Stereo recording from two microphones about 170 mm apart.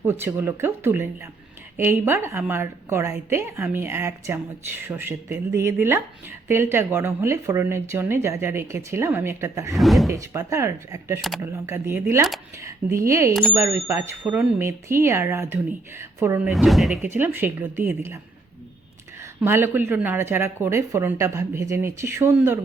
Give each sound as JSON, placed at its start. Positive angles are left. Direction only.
{"t": 0.0, "sound": "speech", "side_deg": -15}
{"t": 9.7, "sound": "speech", "side_deg": 0}
{"t": 10.1, "sound": "speech", "side_deg": -15}
{"t": 16.5, "sound": "speech", "side_deg": 0}
{"t": 17.0, "sound": "speech", "side_deg": -10}
{"t": 19.2, "sound": "speech", "side_deg": -15}